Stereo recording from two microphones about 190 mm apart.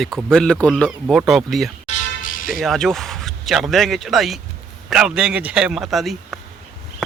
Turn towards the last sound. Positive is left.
turn(degrees=0)  # may be behind; listen again after turning